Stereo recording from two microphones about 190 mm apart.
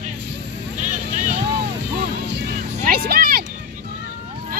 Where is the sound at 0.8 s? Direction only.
40° right (ahead or behind).